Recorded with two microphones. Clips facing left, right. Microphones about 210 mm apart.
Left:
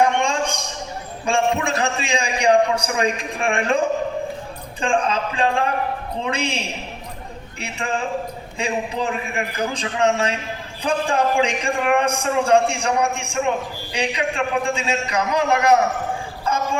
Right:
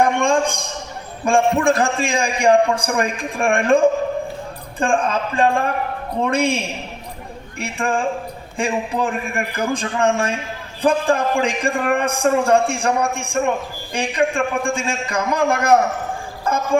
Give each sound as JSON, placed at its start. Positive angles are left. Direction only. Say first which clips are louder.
{"t": 0.0, "sound": "a sound", "louder": "right 3 dB", "side_deg": -50}
{"t": 1.2, "sound": "a man's voice", "louder": "right 4 dB", "side_deg": -50}
{"t": 7.6, "sound": "a man's voice", "louder": "right 4 dB", "side_deg": -50}